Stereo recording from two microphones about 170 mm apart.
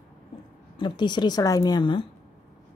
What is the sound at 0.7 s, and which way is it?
Speech, 25° left (ahead or behind).